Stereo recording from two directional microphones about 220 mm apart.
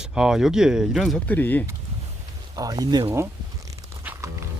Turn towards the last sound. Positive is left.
turn(degrees=-15)  # may be behind; listen again after turning